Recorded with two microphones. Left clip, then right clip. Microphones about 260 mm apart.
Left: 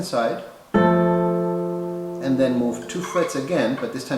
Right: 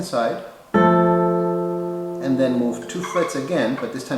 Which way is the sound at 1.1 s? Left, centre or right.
Centre.